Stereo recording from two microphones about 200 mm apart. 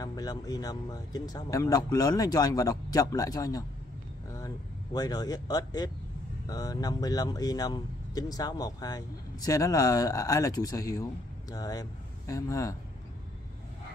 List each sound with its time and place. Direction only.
0.0 s speech: 20° left (ahead or behind)
4.9 s speech: 20° left (ahead or behind)